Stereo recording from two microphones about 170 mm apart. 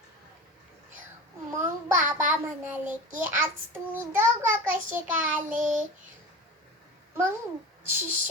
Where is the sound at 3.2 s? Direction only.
10° right (ahead or behind).